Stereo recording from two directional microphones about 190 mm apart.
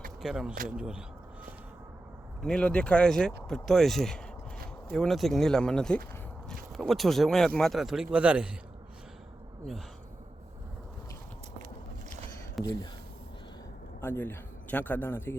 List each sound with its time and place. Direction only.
0.2 s speech: centre (ahead or behind)
2.4 s speech: 5° left (ahead or behind)
12.6 s speech: 20° left (ahead or behind)
14.0 s a man's voice: 10° left (ahead or behind)